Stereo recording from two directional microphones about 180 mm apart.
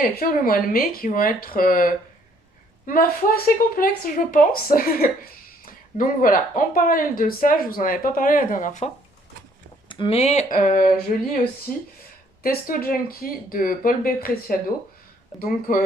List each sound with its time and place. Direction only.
0.2 s speech: 55° left (ahead or behind)
9.9 s speech: 30° left (ahead or behind); by 15.8 s 50° left (ahead or behind)